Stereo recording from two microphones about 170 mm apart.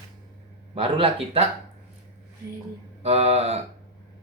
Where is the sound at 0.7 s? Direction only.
35° right (ahead or behind).